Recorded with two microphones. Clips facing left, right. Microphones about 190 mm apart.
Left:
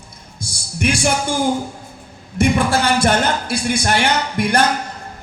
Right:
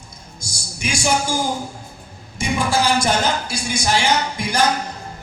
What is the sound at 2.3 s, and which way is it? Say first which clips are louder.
A man's voice: left 4 dB; 60° left (ahead or behind).